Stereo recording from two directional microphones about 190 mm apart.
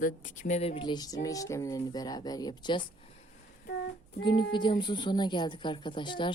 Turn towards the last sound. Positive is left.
turn(degrees=25)  # may be behind; listen again after turning